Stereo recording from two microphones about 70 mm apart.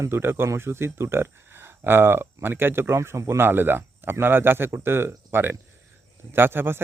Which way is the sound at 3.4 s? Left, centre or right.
Right.